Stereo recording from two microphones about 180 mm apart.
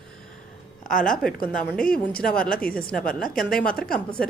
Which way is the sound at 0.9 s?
50° left (ahead or behind).